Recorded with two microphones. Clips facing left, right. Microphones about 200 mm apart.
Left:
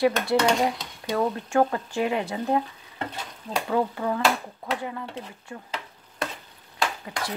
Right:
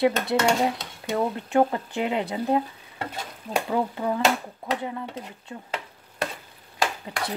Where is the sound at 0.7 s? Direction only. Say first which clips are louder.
Even; 25° right (ahead or behind).